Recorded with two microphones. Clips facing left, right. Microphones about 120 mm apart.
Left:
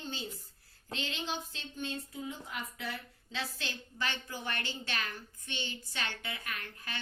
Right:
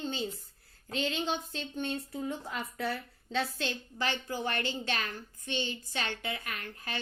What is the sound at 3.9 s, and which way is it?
A woman's voice, 45° right (ahead or behind).